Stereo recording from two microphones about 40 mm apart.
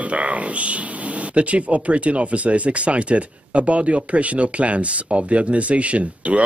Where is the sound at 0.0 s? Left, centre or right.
Right.